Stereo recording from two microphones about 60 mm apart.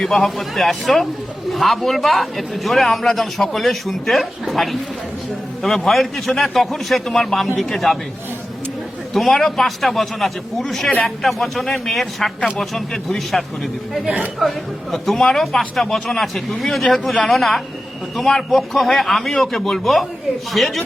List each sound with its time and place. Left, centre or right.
0.0 s speech: centre
9.1 s speech: centre